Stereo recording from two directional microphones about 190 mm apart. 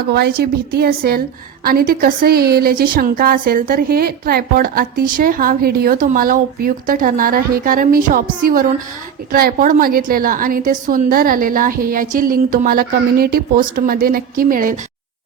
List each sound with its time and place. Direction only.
0.1 s a woman's voice: 55° right (ahead or behind)